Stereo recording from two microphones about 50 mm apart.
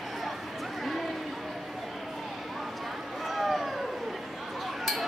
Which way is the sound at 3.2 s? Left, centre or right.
Centre.